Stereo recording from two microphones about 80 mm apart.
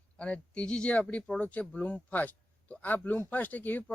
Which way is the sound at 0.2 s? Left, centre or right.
Centre.